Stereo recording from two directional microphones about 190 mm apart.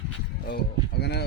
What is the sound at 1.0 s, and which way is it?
Speech, 60° left (ahead or behind).